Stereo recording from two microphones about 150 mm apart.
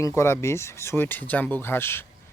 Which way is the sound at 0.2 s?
20° left (ahead or behind).